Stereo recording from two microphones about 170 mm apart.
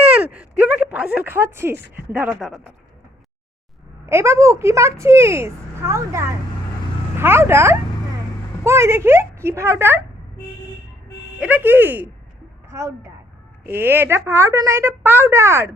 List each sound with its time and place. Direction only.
0.2 s speech: 10° right (ahead or behind)
4.0 s speech: 15° right (ahead or behind)
11.3 s speech: 10° right (ahead or behind)